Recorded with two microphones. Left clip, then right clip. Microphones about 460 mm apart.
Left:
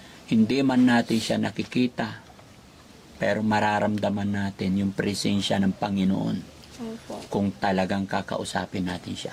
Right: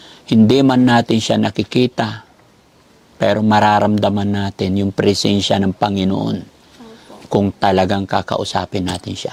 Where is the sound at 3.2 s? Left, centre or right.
Right.